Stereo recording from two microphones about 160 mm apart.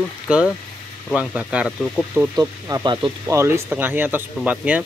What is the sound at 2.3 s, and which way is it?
Speech, 25° right (ahead or behind).